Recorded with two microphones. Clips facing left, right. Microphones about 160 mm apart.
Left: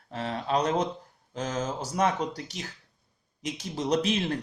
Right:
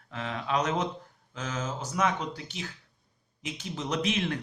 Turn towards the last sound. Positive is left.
turn(degrees=30)  # may be behind; listen again after turning